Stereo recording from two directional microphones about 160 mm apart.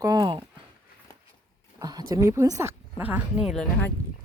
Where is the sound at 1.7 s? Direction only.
25° right (ahead or behind); by 3.6 s 5° right (ahead or behind).